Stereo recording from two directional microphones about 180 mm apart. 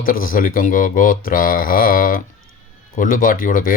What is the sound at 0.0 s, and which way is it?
Speech, 50° left (ahead or behind).